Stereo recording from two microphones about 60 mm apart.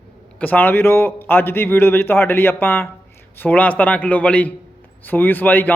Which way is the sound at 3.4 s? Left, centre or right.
Left.